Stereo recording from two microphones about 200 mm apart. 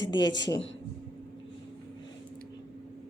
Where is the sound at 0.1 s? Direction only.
20° left (ahead or behind).